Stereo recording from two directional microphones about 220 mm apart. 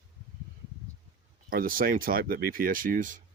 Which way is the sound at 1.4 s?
40° right (ahead or behind).